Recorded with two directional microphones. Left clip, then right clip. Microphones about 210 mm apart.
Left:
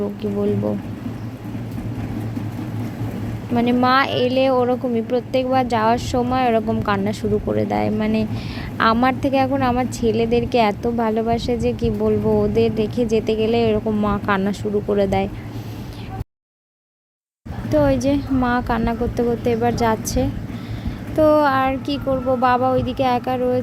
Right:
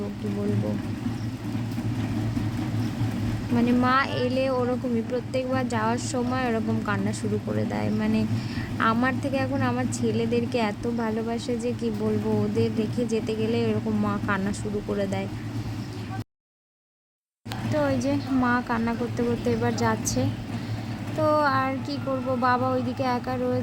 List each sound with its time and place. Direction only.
3.5 s speech: 30° left (ahead or behind)
17.7 s speech: 25° left (ahead or behind)
21.2 s speech: 25° left (ahead or behind)